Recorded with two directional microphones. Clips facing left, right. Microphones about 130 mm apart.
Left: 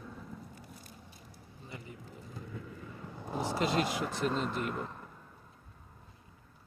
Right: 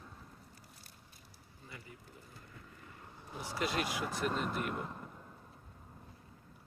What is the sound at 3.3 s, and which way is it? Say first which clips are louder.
Speech: left 10 dB; 90° left.